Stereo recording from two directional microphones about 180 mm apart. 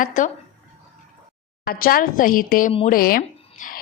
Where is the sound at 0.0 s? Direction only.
45° left (ahead or behind).